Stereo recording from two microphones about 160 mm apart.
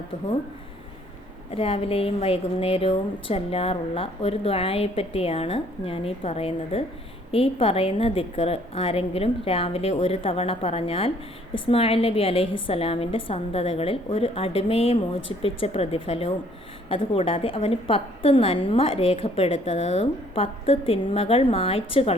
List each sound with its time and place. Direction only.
1.5 s a woman's voice: 35° left (ahead or behind)